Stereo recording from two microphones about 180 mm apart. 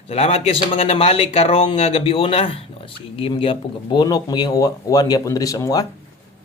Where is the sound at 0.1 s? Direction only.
35° left (ahead or behind); by 5.8 s 20° left (ahead or behind).